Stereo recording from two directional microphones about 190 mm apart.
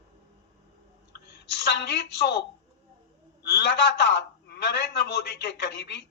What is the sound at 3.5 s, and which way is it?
A man's voice, 60° left (ahead or behind).